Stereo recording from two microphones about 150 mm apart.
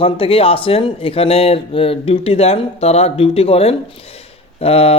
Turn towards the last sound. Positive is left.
turn(degrees=40)  # may be behind; listen again after turning